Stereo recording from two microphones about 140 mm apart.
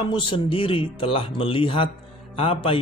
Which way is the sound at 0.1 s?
40° left (ahead or behind).